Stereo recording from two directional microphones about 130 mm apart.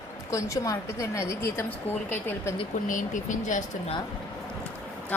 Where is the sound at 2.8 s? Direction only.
80° left.